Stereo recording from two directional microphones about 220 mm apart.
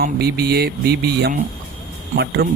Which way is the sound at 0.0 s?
45° right (ahead or behind).